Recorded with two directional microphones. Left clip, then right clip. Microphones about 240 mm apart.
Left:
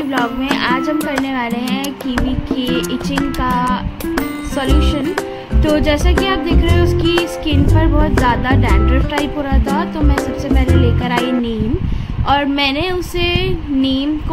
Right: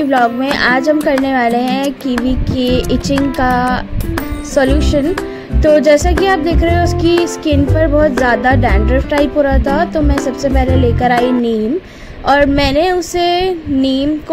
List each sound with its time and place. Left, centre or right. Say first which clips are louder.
0.1 s music: right 4 dB; right